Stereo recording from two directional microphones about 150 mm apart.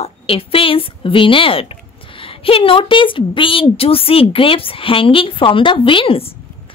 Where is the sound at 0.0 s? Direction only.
40° left (ahead or behind).